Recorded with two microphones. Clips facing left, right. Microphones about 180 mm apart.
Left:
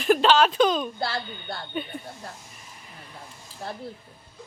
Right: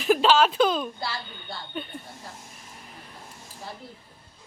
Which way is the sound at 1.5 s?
60° left (ahead or behind).